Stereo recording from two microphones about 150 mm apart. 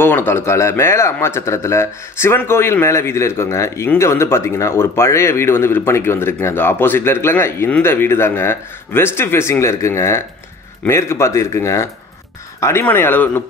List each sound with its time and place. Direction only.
0.0 s a man's voice: 15° left (ahead or behind)